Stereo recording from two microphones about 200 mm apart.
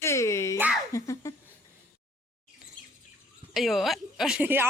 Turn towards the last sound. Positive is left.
turn(degrees=-10)  # may be behind; listen again after turning